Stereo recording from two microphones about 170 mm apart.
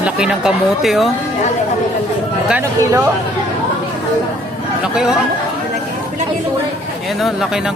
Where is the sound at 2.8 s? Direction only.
20° right (ahead or behind).